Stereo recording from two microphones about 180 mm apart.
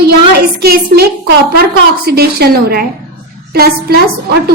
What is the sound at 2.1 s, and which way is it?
A woman's voice, 60° right (ahead or behind).